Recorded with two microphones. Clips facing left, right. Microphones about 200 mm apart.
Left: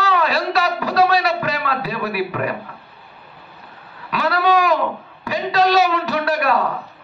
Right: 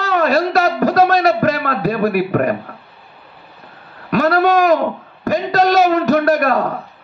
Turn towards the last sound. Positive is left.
turn(degrees=-45)  # may be behind; listen again after turning